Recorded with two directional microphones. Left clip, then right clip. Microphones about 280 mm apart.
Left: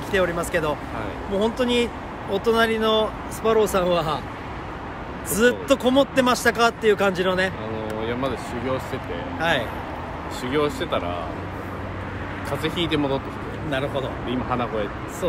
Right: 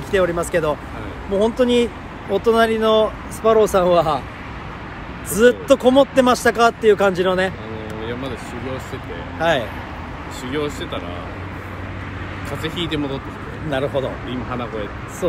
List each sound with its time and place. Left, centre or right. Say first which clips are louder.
0.1 s speech: right 4 dB; centre
5.3 s speech: right 5 dB; centre
8.0 s speech: left 1 dB; centre
9.4 s speech: right 4 dB; centre
10.4 s speech: left 1 dB; centre
12.4 s speech: even; centre
13.7 s speech: right 5 dB; centre